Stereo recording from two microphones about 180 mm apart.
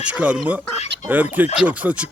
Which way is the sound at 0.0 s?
5° right (ahead or behind).